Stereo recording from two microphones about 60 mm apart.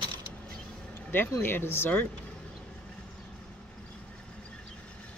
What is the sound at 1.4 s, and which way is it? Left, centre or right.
Speech, left.